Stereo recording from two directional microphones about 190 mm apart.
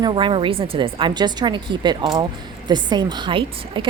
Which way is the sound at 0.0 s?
25° right (ahead or behind).